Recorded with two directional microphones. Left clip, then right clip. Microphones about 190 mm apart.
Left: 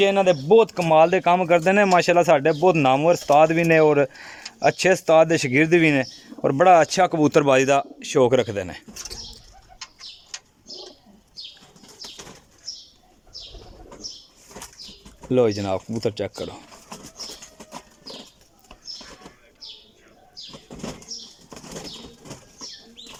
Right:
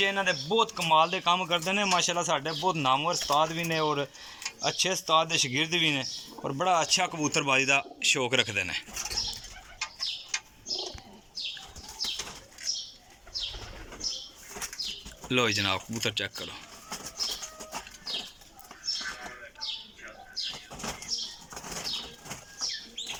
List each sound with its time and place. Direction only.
0.0 s speech: 65° left (ahead or behind); by 8.8 s 45° left (ahead or behind)
15.3 s speech: 40° left (ahead or behind)